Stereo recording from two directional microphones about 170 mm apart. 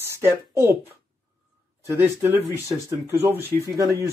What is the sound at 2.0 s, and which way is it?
Speech, 15° right (ahead or behind).